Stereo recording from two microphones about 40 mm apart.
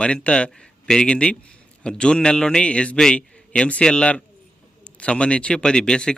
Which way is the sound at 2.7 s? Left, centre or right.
Left.